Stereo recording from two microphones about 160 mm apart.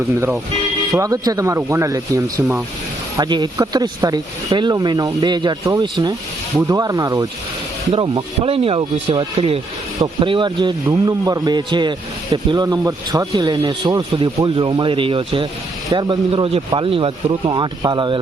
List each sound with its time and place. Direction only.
0.9 s speech: 20° right (ahead or behind)
7.9 s speech: 30° right (ahead or behind)